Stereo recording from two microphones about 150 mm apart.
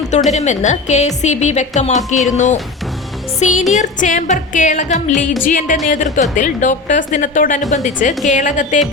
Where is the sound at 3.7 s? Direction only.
55° left (ahead or behind).